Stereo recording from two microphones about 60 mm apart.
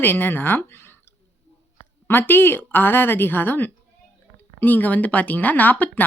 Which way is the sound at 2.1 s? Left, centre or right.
Left.